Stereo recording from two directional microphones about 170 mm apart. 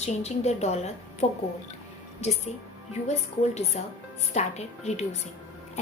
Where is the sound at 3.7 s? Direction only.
40° left (ahead or behind).